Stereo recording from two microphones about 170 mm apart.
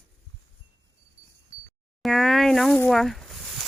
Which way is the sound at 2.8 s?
Centre (ahead or behind).